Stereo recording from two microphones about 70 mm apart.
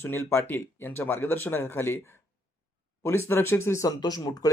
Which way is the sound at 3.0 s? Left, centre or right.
Left.